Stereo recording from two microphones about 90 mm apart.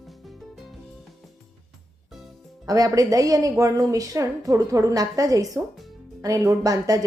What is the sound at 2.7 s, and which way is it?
A woman's voice, 40° right (ahead or behind).